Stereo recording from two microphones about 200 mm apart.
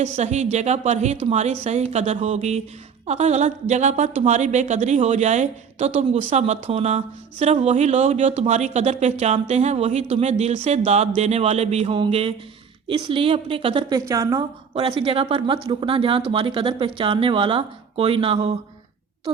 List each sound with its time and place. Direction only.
0.0 s a woman's voice: 35° right (ahead or behind); by 14.4 s 15° right (ahead or behind)
14.8 s speech: 25° right (ahead or behind)